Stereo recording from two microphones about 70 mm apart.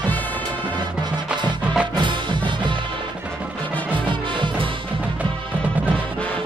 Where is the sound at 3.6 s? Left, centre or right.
Left.